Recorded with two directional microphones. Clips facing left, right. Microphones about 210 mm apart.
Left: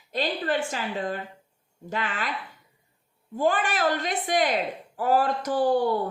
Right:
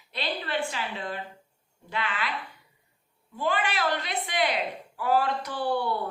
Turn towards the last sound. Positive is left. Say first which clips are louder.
# left 6 dB
turn(degrees=45)  # may be behind; listen again after turning